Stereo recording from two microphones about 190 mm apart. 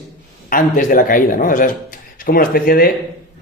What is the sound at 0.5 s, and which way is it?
A man's voice, 45° left (ahead or behind).